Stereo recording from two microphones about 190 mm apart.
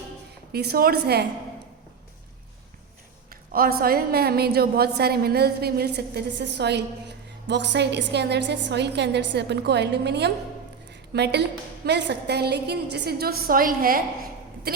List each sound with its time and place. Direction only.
0.5 s a woman's voice: 55° right (ahead or behind)
3.2 s a woman's voice: 50° right (ahead or behind)